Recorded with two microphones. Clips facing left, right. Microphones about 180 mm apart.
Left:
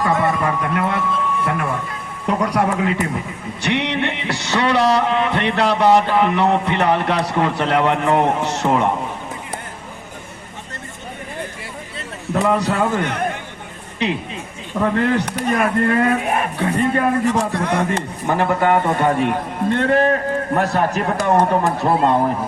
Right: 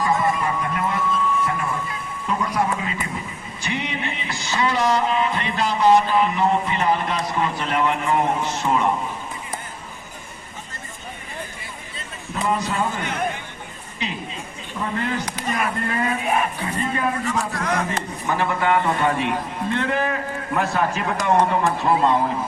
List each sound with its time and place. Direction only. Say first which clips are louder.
0.0 s a sound: left 3 dB; 65° left (ahead or behind)
2.2 s speech: left 5 dB; 70° left (ahead or behind)
3.6 s music: left 7 dB; 70° left (ahead or behind)
11.9 s speech: left 8 dB; 65° left (ahead or behind)
14.8 s speech: left 8 dB; 60° left (ahead or behind)
17.5 s speech: left 4 dB; 30° left (ahead or behind)
18.3 s a man's voice: left 5 dB; 50° left (ahead or behind)